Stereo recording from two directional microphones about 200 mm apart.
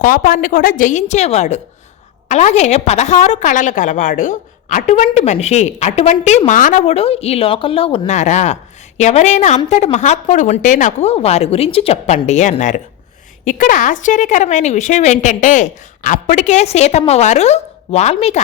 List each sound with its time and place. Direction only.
0.0 s a woman's voice: 45° left (ahead or behind)